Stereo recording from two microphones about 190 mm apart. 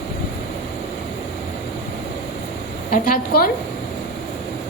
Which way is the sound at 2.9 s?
45° left (ahead or behind).